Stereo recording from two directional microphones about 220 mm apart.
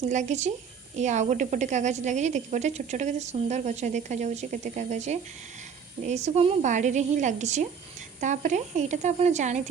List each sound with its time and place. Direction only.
0.1 s speech: 35° right (ahead or behind)